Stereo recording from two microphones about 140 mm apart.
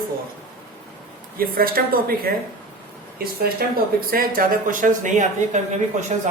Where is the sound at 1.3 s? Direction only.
90° right; by 5.6 s 60° right (ahead or behind).